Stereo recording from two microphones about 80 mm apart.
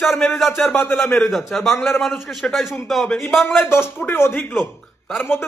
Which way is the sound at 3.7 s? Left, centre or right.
Left.